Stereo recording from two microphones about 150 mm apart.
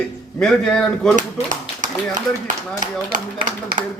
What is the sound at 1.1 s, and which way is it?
Clapping, 55° right (ahead or behind).